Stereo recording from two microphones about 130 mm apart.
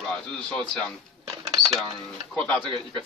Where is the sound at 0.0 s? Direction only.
5° left (ahead or behind).